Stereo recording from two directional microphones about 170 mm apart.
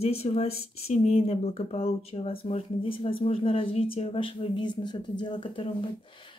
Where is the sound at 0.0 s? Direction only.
35° left (ahead or behind).